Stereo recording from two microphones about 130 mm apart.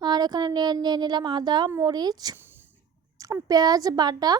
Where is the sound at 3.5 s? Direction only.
30° right (ahead or behind).